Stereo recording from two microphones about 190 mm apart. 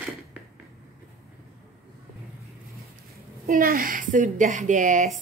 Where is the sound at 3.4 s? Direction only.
45° right (ahead or behind).